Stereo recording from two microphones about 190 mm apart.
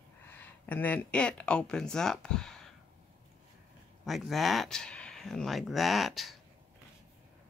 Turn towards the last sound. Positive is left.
turn(degrees=0)  # may be behind; listen again after turning